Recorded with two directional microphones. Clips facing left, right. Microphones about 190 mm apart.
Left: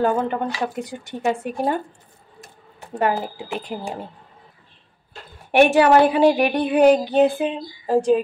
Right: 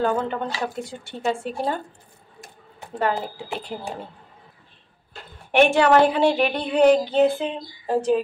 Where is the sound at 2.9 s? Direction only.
15° left (ahead or behind).